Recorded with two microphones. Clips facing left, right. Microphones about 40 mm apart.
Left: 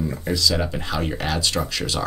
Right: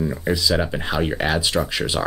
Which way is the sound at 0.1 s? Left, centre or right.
Centre.